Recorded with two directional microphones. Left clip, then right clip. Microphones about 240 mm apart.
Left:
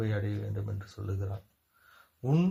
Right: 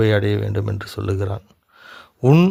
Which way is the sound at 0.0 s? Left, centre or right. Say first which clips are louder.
Right 18 dB; right.